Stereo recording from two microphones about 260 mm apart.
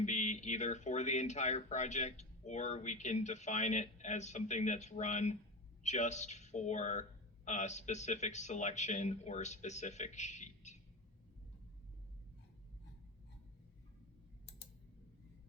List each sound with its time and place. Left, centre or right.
0.0 s speech: left